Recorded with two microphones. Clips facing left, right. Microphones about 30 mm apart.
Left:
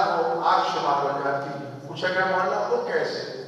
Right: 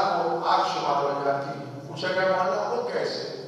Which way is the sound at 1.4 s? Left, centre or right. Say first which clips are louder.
Left 1 dB; centre.